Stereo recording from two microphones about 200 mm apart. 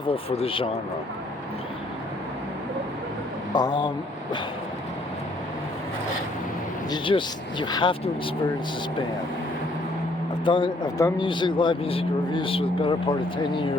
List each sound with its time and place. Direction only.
0.1 s speech: 30° left (ahead or behind)
3.5 s speech: 20° left (ahead or behind)
6.9 s speech: 25° left (ahead or behind)
10.4 s speech: 25° left (ahead or behind)